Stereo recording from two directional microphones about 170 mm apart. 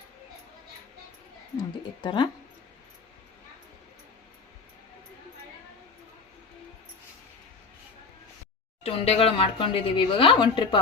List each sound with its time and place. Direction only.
2.0 s speech: 25° left (ahead or behind)
8.8 s speech: 35° left (ahead or behind)